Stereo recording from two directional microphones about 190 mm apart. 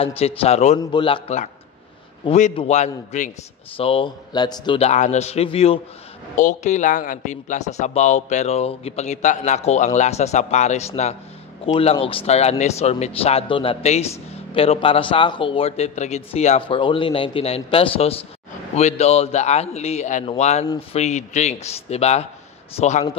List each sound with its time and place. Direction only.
0.4 s speech: 35° left (ahead or behind)
0.7 s a man's voice: 25° left (ahead or behind)
2.5 s speech: 35° left (ahead or behind)